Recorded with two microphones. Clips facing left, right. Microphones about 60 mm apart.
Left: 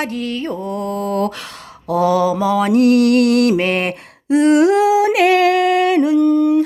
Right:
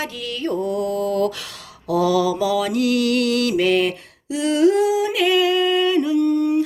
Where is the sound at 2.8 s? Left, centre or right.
Left.